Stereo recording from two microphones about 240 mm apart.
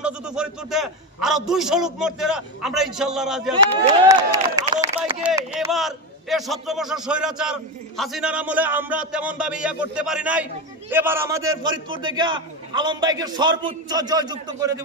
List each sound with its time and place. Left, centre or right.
0.0 s a man's voice: centre
3.5 s a man's voice: centre